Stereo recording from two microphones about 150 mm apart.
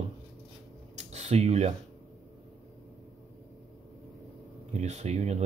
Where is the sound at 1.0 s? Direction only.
45° right (ahead or behind).